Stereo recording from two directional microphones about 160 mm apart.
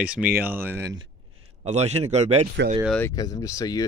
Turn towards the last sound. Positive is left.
turn(degrees=20)  # may be behind; listen again after turning